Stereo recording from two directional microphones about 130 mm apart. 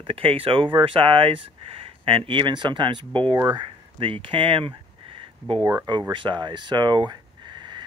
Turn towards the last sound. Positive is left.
turn(degrees=-35)  # may be behind; listen again after turning